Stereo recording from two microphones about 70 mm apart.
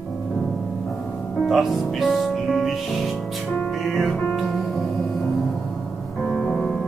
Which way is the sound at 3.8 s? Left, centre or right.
Centre.